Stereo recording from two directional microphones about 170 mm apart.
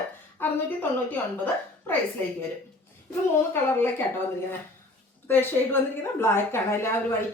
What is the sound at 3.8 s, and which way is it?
Speech, 10° left (ahead or behind).